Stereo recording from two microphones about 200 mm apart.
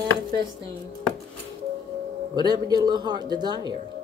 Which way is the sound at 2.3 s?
20° right (ahead or behind).